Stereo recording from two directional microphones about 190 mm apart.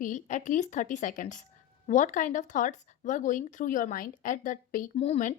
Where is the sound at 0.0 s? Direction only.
40° left (ahead or behind).